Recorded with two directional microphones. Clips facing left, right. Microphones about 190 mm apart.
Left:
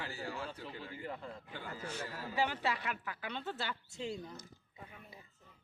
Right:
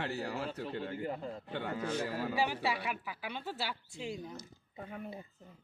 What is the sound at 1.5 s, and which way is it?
Speech, 65° right (ahead or behind).